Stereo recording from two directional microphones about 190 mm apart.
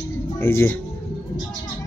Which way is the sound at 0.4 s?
10° left (ahead or behind).